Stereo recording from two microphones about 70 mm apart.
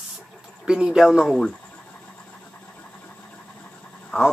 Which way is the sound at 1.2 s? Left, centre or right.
Centre.